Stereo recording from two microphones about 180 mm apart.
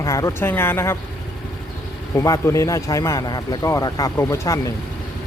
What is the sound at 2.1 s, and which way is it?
Speech, 15° left (ahead or behind).